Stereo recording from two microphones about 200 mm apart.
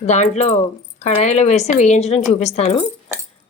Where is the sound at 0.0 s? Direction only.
35° left (ahead or behind).